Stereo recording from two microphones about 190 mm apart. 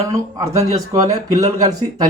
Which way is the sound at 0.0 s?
15° right (ahead or behind).